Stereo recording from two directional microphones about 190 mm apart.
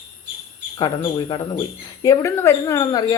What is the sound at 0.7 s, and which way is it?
Speech, 20° left (ahead or behind).